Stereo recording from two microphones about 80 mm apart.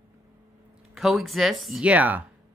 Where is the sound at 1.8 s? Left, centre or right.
Centre.